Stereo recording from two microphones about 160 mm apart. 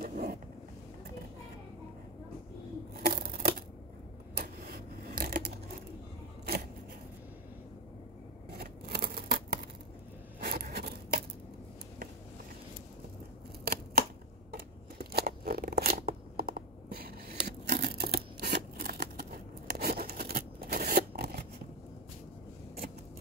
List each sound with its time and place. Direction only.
0.0 s vehicle: 60° right (ahead or behind)
2.9 s a sound: 70° right (ahead or behind)
8.5 s scissors: 75° right (ahead or behind)
13.7 s scissors: 80° right